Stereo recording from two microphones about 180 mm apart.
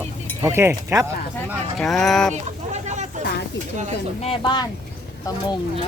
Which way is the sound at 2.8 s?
40° right (ahead or behind).